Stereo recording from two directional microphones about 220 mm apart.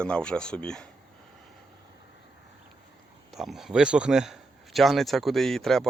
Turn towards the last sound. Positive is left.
turn(degrees=0)  # may be behind; listen again after turning